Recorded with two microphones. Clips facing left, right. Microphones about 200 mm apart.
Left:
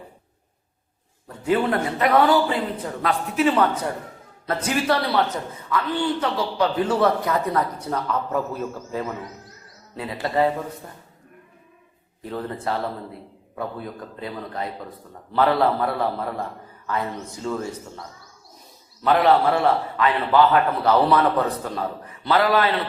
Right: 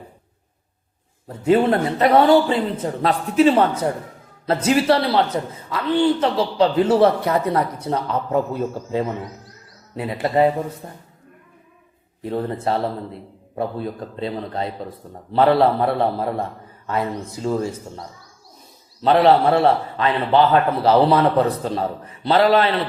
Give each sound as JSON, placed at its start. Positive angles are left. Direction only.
{"t": 1.3, "sound": "a man's voice", "side_deg": -25}
{"t": 12.2, "sound": "a man's voice", "side_deg": -25}
{"t": 19.0, "sound": "a man's voice", "side_deg": -30}